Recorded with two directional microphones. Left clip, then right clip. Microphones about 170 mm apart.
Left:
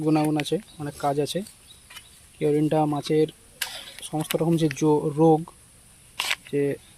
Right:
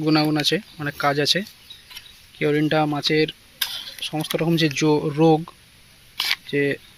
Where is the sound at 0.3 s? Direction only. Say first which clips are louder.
Right 4 dB; centre (ahead or behind).